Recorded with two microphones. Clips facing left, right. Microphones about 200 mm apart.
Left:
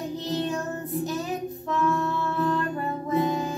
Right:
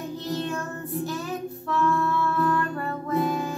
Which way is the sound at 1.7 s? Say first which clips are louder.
Right 1 dB; 20° left (ahead or behind).